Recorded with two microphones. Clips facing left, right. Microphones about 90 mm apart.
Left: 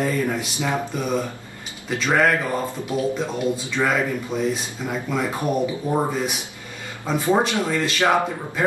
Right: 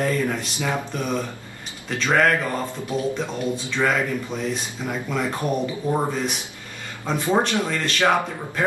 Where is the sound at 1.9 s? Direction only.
5° left (ahead or behind).